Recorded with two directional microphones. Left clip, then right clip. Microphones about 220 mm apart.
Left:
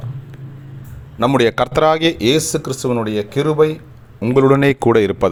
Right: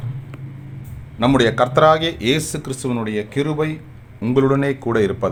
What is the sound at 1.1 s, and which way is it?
Speech, 25° left (ahead or behind).